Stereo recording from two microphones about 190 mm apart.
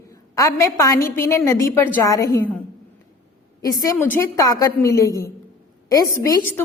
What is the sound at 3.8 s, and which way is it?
A woman's voice, 20° left (ahead or behind).